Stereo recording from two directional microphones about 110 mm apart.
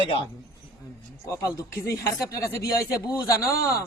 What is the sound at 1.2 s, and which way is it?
Speech, 30° left (ahead or behind).